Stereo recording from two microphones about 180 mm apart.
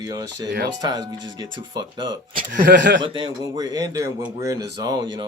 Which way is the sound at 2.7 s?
75° right (ahead or behind).